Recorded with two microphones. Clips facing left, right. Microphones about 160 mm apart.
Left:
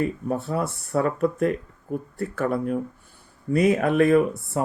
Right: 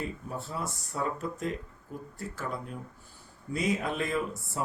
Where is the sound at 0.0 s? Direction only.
60° left (ahead or behind).